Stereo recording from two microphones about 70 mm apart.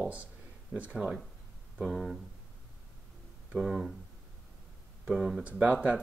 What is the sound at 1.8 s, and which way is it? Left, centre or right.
Speech, centre.